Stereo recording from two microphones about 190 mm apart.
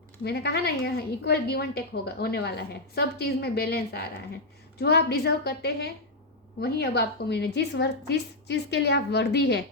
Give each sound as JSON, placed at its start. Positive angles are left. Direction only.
{"t": 0.3, "sound": "a woman's voice", "side_deg": 55}